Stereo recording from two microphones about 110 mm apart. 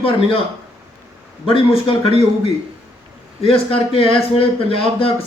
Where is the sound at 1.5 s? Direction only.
55° left (ahead or behind).